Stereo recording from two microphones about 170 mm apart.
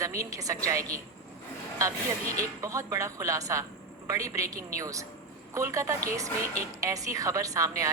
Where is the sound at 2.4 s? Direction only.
20° right (ahead or behind).